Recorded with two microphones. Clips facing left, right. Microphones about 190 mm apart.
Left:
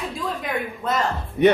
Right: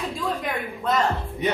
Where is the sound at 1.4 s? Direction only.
65° left (ahead or behind).